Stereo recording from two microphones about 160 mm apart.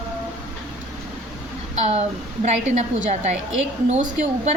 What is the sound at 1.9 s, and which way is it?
A woman's voice, 45° right (ahead or behind).